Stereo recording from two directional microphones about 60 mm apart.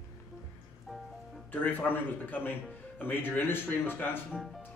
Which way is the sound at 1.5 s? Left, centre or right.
Left.